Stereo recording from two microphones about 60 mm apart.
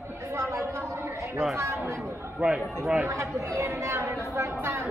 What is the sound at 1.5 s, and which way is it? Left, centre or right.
Speech, right.